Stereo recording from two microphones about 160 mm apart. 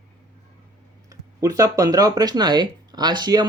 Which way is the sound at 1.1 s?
20° right (ahead or behind).